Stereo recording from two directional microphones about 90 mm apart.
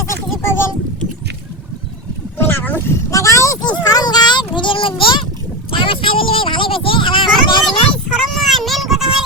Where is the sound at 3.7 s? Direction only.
50° left (ahead or behind); by 7.2 s 70° left (ahead or behind).